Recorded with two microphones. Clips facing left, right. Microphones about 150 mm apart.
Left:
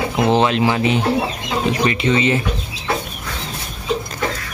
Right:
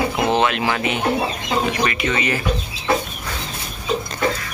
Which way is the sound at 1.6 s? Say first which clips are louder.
Left 4 dB; 30° left (ahead or behind).